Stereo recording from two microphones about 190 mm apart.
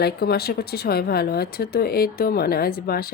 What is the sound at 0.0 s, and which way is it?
Speech, 55° left (ahead or behind).